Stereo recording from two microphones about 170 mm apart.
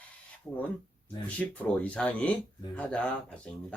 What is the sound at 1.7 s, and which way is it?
Speech, 5° left (ahead or behind).